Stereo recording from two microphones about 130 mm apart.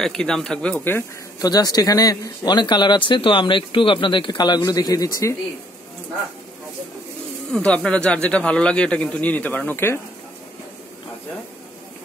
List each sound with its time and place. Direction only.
0.0 s speech: 5° left (ahead or behind)
1.4 s speech: 30° left (ahead or behind)
7.5 s a man's voice: 10° left (ahead or behind)